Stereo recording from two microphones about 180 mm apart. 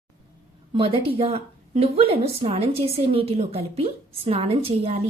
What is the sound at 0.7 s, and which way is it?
Speech, 30° right (ahead or behind).